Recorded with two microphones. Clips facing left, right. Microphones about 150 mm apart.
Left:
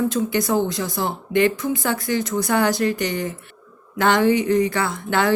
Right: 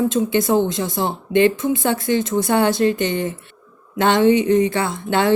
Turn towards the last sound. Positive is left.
turn(degrees=-25)  # may be behind; listen again after turning